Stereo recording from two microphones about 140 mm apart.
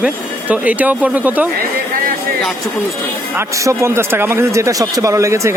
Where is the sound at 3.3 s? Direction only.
20° right (ahead or behind).